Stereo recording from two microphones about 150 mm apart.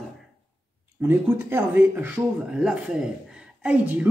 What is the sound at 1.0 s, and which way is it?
A man's voice, 15° right (ahead or behind).